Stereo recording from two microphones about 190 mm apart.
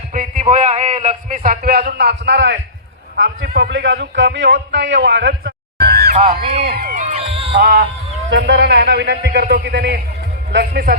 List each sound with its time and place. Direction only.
0.1 s a man's voice: 45° right (ahead or behind); by 2.6 s 70° right (ahead or behind)
3.2 s a man's voice: 55° right (ahead or behind)
6.1 s speech: 30° right (ahead or behind)
6.7 s speech: 55° right (ahead or behind)
7.0 s a sound: 35° right (ahead or behind)
7.5 s a man's voice: 50° right (ahead or behind)
8.3 s a man's voice: 65° right (ahead or behind)